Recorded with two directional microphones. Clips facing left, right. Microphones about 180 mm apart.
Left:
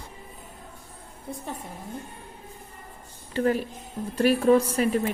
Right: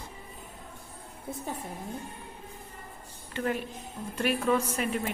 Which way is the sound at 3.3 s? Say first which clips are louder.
Left 7 dB; 40° left (ahead or behind).